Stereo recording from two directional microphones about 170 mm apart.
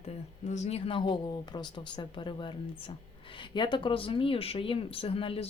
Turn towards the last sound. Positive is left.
turn(degrees=35)  # may be behind; listen again after turning